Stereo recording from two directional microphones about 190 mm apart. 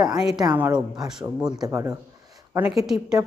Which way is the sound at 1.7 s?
15° right (ahead or behind).